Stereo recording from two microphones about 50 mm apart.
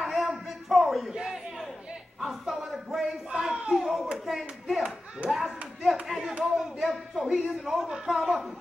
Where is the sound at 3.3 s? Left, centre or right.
Centre.